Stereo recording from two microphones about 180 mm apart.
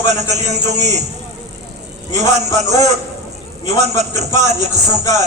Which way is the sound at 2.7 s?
40° right (ahead or behind).